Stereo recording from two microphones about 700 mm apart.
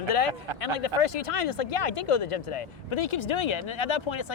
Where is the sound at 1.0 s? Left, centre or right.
Left.